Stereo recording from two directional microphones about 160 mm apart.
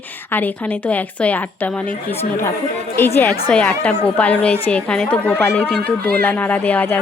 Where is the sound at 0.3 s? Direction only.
10° left (ahead or behind).